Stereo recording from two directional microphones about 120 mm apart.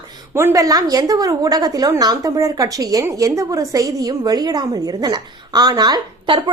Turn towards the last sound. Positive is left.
turn(degrees=-40)  # may be behind; listen again after turning